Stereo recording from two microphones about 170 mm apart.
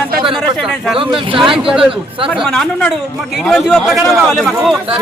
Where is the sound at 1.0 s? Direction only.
30° right (ahead or behind).